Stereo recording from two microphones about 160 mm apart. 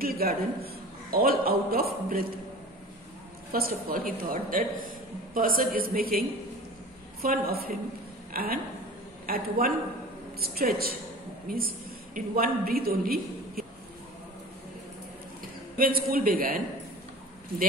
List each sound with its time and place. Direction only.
0.0 s a man's voice: 70° right (ahead or behind)
3.5 s a woman's voice: 65° right (ahead or behind)
15.8 s a woman's voice: 65° right (ahead or behind)